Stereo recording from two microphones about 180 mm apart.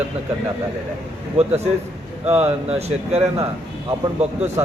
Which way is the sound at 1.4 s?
35° right (ahead or behind).